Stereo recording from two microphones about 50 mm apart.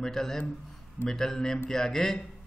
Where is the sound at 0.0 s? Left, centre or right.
Centre.